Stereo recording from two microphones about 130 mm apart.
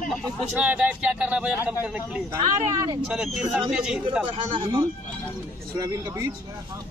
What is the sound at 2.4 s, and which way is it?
Speech, 30° right (ahead or behind).